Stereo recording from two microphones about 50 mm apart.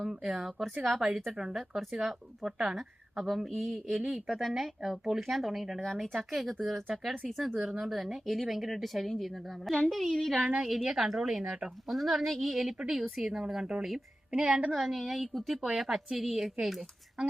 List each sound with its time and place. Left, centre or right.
0.1 s a woman's voice: centre
17.2 s speech: centre